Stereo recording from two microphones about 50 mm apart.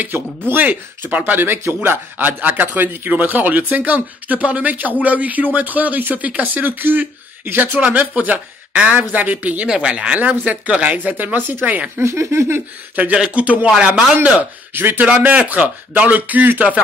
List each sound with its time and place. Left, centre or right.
0.5 s speech: right
9.7 s speech: right
12.0 s speech: right
12.9 s speech: right
13.7 s a man's voice: centre
14.1 s speech: right
15.0 s speech: right